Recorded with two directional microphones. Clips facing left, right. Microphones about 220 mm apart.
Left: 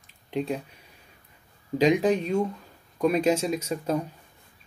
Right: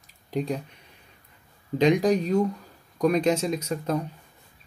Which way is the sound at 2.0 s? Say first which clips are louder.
Right 1 dB; 35° right (ahead or behind).